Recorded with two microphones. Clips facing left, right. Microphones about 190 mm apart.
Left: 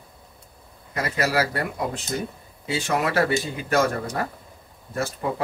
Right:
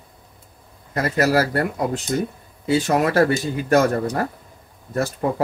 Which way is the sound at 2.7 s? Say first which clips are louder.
Right 6 dB; 40° right (ahead or behind).